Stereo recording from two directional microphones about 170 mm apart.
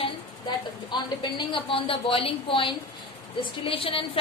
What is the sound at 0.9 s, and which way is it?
A woman's voice, 25° left (ahead or behind).